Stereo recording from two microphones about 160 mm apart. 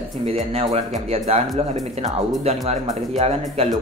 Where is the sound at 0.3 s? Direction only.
40° right (ahead or behind).